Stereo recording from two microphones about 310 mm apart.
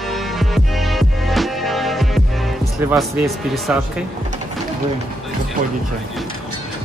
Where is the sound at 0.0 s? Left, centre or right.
Centre.